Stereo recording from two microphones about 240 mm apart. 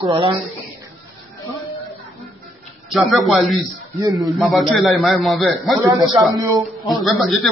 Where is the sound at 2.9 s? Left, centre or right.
Centre.